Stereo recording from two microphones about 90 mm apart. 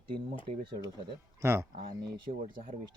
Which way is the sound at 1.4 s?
30° right (ahead or behind).